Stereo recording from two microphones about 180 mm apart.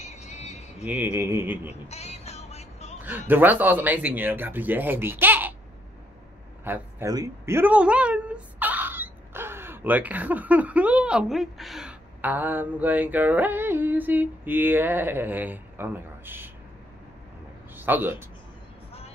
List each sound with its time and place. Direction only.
0.0 s a sound: 40° left (ahead or behind)
0.8 s speech: 10° right (ahead or behind)
1.9 s music: 35° left (ahead or behind)
3.0 s speech: 10° right (ahead or behind)
6.6 s speech: 15° right (ahead or behind)
17.7 s speech: 10° right (ahead or behind)